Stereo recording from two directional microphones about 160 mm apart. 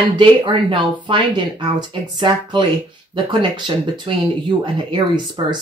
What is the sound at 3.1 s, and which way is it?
Speech, 30° right (ahead or behind).